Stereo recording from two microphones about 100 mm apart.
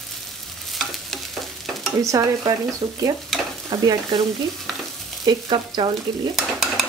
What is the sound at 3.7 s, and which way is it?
Frying, 45° right (ahead or behind).